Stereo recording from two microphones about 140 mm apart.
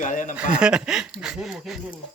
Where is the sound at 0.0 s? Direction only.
65° left (ahead or behind).